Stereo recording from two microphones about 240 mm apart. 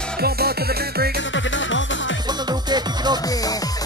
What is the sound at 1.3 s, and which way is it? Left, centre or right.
Music, left.